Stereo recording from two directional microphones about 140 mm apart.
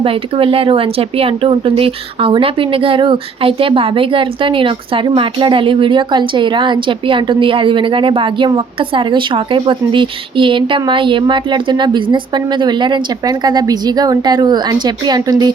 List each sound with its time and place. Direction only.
0.0 s speech: 40° right (ahead or behind)